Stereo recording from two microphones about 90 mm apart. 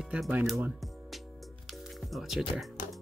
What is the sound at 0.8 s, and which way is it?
Music, centre (ahead or behind).